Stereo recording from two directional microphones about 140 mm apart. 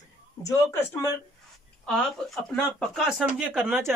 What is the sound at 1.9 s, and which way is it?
Speech, centre (ahead or behind).